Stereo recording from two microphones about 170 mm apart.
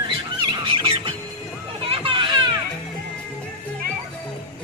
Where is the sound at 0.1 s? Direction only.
30° right (ahead or behind).